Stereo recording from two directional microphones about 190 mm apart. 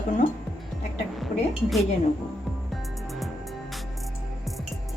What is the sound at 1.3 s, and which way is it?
Speech, 40° left (ahead or behind).